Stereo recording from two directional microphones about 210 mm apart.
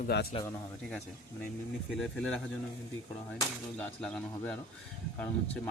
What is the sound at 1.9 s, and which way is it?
Speech, centre (ahead or behind).